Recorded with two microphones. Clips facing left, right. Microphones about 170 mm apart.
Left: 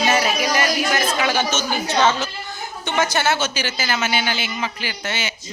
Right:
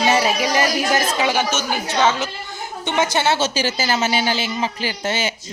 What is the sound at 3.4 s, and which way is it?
A man's voice, 40° right (ahead or behind).